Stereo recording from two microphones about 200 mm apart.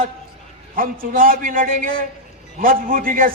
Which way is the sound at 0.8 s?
45° right (ahead or behind).